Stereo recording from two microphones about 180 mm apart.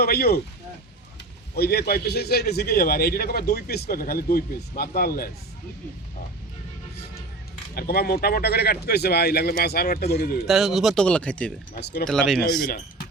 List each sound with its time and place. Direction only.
0.0 s a man's voice: 60° left (ahead or behind)
1.5 s a man's voice: 60° left (ahead or behind)
7.8 s a man's voice: 60° left (ahead or behind)
10.4 s speech: centre (ahead or behind)
11.7 s a man's voice: 60° left (ahead or behind)
12.0 s speech: centre (ahead or behind)
12.6 s a man's voice: 60° left (ahead or behind)